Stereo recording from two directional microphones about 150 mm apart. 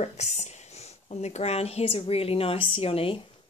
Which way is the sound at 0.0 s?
50° left (ahead or behind).